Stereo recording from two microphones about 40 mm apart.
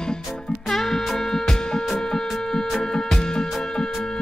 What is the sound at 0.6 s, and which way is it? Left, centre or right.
Music, centre.